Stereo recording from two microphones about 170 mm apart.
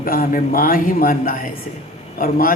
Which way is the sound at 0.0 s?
55° left (ahead or behind).